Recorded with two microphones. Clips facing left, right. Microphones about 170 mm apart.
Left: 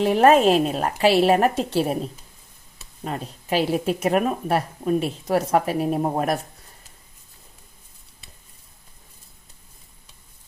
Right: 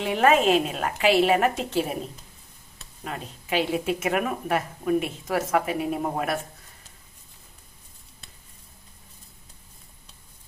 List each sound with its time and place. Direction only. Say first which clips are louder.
0.0 s a woman's voice: left 5 dB; 40° left (ahead or behind)
3.0 s a woman's voice: left 5 dB; 35° left (ahead or behind)